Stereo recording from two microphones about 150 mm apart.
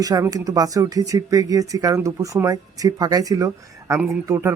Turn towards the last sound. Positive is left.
turn(degrees=-15)  # may be behind; listen again after turning